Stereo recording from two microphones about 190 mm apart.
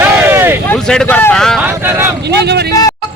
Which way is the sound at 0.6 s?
5° left (ahead or behind).